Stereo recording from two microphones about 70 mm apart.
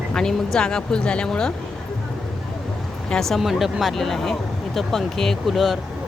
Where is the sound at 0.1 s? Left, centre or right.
Centre.